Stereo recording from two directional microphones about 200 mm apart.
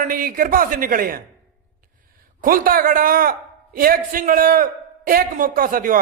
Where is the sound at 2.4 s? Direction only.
45° right (ahead or behind).